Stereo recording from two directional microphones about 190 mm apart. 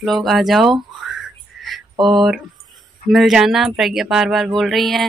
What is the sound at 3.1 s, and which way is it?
Speech, centre (ahead or behind).